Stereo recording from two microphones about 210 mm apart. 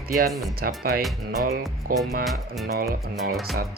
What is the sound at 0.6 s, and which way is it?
Speech, 45° right (ahead or behind).